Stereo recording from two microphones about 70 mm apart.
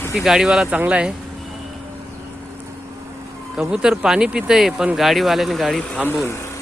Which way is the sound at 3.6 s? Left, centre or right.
Centre.